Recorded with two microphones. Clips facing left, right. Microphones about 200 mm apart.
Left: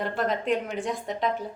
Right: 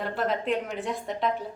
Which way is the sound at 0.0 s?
Centre (ahead or behind).